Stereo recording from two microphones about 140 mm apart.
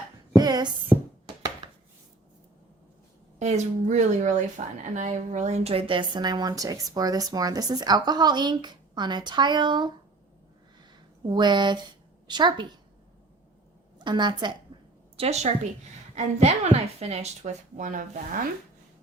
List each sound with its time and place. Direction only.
0.3 s a sound: 30° right (ahead or behind)
3.3 s a woman's voice: 55° right (ahead or behind); by 9.9 s 30° right (ahead or behind)
11.3 s a woman's voice: 30° right (ahead or behind)
14.0 s a woman's voice: 35° right (ahead or behind)
15.1 s a woman's voice: 45° right (ahead or behind); by 18.4 s 70° right (ahead or behind)